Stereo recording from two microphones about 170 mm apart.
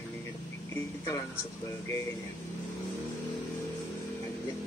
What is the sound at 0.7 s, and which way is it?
Speech, 20° left (ahead or behind).